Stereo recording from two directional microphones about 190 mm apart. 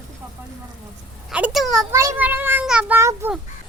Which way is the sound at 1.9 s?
15° right (ahead or behind).